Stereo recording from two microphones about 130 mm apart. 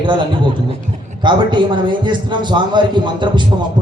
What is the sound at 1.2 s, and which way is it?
A man's voice, 35° right (ahead or behind).